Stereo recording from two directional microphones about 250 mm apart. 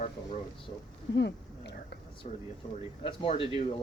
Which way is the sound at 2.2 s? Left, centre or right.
Left.